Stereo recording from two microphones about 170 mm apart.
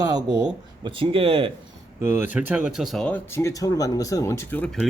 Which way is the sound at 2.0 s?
15° right (ahead or behind).